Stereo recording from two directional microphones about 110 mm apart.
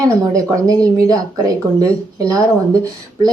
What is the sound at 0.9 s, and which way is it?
A woman's voice, 35° right (ahead or behind).